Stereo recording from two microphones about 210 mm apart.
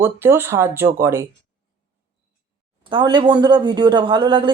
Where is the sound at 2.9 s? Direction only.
20° right (ahead or behind).